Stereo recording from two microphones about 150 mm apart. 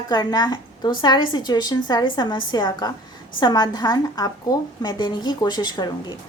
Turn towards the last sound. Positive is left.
turn(degrees=25)  # may be behind; listen again after turning